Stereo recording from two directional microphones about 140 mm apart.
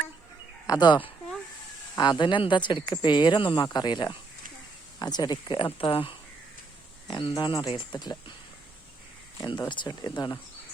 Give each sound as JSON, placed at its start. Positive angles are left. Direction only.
{"t": 0.7, "sound": "speech", "side_deg": 30}
{"t": 9.4, "sound": "speech", "side_deg": 30}